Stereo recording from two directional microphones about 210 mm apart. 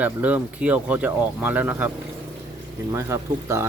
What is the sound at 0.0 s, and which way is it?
Speech, 5° right (ahead or behind).